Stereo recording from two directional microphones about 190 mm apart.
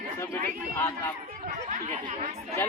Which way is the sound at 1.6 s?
35° right (ahead or behind).